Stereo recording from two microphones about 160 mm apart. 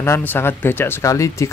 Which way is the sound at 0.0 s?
15° left (ahead or behind).